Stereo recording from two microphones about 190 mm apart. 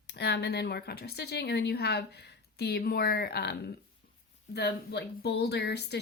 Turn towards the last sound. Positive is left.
turn(degrees=60)  # may be behind; listen again after turning